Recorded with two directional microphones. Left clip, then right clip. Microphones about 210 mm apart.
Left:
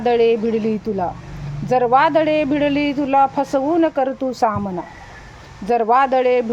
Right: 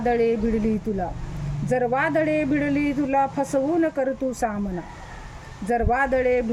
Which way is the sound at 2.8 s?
40° left (ahead or behind).